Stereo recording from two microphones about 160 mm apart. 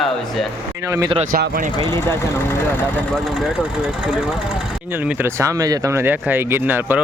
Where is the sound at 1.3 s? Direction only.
60° right (ahead or behind).